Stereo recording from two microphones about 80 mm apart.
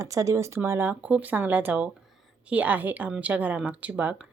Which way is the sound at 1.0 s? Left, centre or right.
Centre.